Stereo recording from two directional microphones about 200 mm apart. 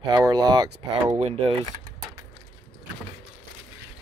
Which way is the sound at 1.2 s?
30° right (ahead or behind).